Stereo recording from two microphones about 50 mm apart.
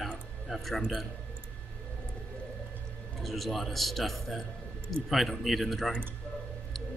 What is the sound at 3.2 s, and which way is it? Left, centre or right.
Speech, centre.